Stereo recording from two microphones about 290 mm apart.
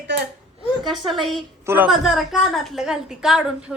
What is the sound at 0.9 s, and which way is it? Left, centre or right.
A woman's voice, centre.